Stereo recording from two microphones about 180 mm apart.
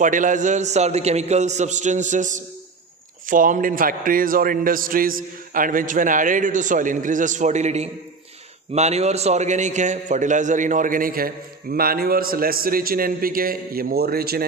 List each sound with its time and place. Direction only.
0.0 s a man's voice: 45° right (ahead or behind)